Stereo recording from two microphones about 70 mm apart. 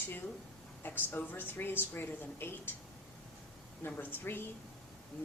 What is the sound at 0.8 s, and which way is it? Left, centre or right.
Speech, left.